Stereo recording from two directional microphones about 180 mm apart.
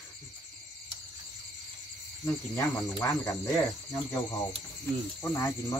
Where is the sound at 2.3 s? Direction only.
15° left (ahead or behind).